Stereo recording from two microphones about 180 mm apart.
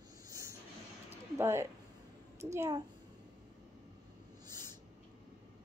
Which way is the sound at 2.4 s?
15° right (ahead or behind).